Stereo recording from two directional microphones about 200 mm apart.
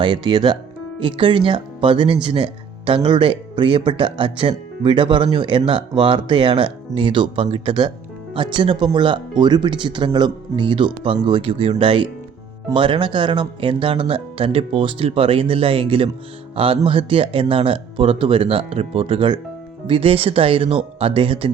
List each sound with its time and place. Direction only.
0.0 s speech: 25° right (ahead or behind)